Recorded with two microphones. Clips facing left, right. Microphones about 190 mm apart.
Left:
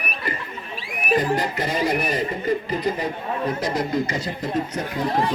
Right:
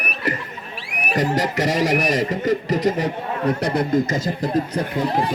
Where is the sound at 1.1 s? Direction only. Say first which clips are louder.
Right 2 dB; 85° right.